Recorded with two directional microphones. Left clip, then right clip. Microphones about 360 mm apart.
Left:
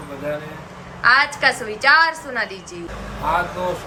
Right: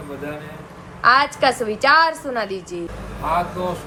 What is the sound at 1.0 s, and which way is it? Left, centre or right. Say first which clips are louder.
A woman's voice: even; centre.